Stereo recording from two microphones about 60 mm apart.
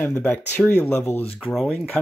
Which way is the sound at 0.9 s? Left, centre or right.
Left.